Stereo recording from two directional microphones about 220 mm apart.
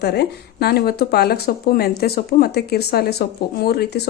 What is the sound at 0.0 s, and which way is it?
Speech, 45° left (ahead or behind).